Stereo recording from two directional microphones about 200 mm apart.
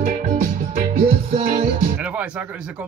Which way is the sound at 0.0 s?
40° right (ahead or behind).